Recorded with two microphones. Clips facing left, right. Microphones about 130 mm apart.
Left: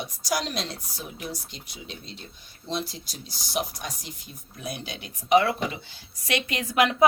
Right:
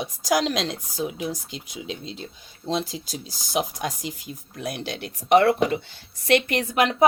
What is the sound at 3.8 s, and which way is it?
Speech, 90° right.